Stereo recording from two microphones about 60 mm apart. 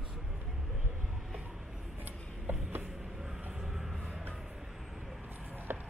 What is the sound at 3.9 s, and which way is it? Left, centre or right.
Music, centre.